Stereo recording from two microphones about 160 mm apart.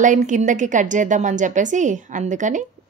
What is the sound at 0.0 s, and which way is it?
A woman's voice, 50° right (ahead or behind).